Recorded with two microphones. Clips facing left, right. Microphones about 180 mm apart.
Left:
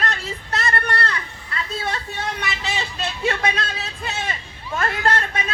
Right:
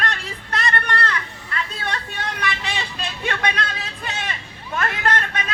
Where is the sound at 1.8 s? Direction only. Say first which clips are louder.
Left 1 dB; 25° left (ahead or behind).